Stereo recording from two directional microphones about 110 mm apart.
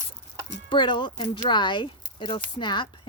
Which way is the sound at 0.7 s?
45° left (ahead or behind).